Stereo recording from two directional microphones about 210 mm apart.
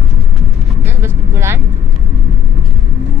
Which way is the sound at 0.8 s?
10° right (ahead or behind).